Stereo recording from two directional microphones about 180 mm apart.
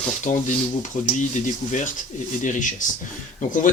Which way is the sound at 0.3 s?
40° left (ahead or behind).